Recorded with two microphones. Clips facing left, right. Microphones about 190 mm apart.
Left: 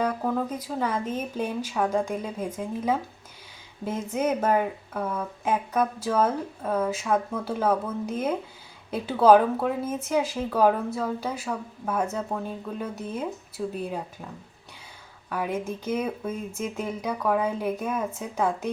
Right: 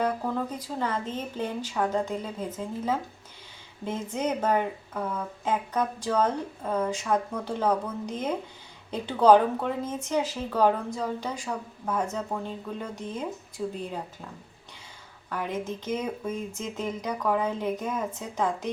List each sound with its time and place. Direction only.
0.6 s speech: 10° left (ahead or behind)
15.3 s speech: 10° left (ahead or behind)